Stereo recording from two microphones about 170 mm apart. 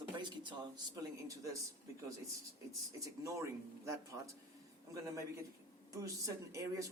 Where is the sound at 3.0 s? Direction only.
20° right (ahead or behind).